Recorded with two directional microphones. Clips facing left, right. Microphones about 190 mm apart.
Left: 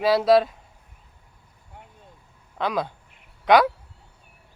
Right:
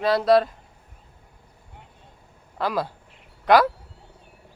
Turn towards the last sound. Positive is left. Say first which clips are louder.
# even
turn(degrees=0)  # may be behind; listen again after turning